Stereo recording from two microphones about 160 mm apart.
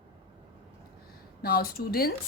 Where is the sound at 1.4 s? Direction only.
70° left (ahead or behind).